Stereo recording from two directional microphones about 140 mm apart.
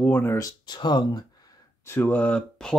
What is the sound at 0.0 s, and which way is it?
Speech, 15° left (ahead or behind).